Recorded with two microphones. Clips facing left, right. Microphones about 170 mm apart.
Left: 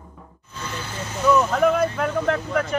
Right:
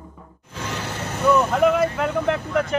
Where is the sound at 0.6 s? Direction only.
80° right; by 1.3 s 65° right (ahead or behind).